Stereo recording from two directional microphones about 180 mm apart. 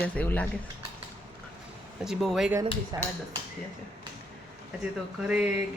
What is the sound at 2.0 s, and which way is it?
Speech, centre (ahead or behind).